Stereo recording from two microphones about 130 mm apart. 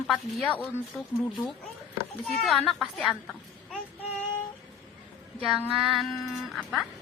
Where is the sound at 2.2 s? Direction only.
Centre (ahead or behind).